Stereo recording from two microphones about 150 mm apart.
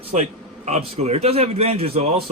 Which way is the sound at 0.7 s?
45° right (ahead or behind).